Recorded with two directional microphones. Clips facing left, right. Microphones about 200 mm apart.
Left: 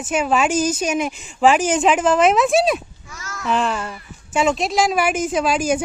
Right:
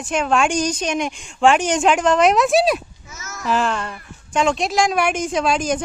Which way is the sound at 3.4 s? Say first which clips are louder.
Even; centre (ahead or behind).